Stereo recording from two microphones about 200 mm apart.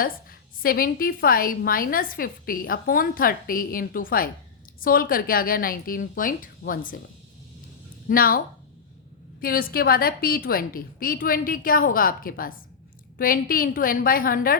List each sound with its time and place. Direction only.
0.0 s a woman's voice: 45° left (ahead or behind)
8.0 s a woman's voice: 45° left (ahead or behind)
9.4 s a woman's voice: 45° left (ahead or behind)